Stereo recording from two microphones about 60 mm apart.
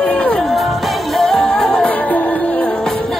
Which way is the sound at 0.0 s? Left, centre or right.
Centre.